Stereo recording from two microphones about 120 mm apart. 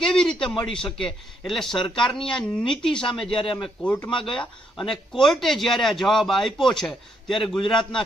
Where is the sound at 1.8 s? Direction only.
40° left (ahead or behind).